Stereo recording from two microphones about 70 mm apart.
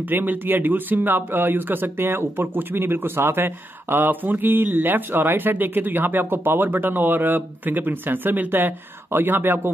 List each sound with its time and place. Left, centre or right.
0.1 s speech: right